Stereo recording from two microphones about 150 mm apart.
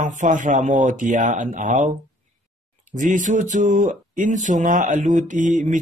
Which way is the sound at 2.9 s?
60° right (ahead or behind).